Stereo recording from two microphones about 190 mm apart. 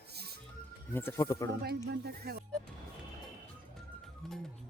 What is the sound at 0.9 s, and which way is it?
Speech, 10° left (ahead or behind).